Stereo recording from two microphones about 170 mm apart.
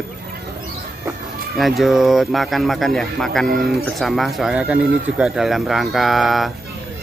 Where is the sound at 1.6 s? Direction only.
Centre (ahead or behind).